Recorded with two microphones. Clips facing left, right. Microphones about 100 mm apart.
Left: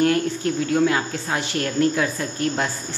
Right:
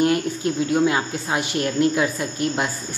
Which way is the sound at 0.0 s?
20° right (ahead or behind).